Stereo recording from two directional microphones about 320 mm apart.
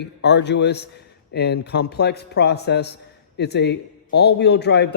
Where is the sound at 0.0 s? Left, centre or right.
Left.